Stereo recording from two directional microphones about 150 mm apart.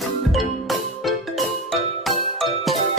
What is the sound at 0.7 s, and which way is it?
Music, centre (ahead or behind).